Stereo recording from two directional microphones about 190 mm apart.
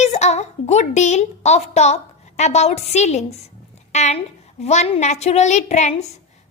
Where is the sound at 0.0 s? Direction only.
35° left (ahead or behind).